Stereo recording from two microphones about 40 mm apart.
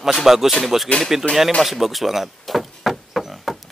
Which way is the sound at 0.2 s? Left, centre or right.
Centre.